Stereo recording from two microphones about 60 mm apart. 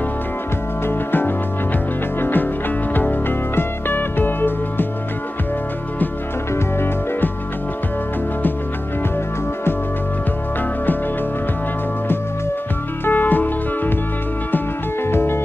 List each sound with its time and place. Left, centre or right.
0.8 s music: left
2.9 s music: left
13.0 s music: left
15.0 s music: left